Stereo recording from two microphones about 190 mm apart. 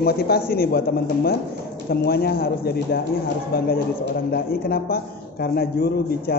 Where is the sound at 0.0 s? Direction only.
55° left (ahead or behind).